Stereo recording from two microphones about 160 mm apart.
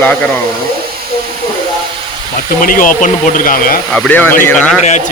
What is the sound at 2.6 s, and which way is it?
Speech, 60° left (ahead or behind).